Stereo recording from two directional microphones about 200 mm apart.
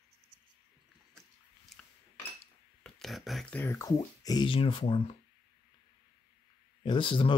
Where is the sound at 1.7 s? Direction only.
Centre (ahead or behind).